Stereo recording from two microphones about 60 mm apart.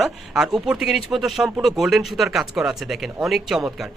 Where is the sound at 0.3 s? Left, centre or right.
Centre.